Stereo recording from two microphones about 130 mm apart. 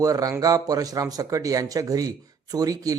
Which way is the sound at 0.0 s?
25° right (ahead or behind).